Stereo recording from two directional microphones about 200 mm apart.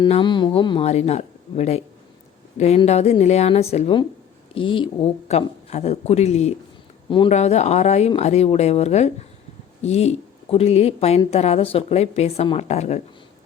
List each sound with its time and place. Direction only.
0.0 s speech: 25° left (ahead or behind)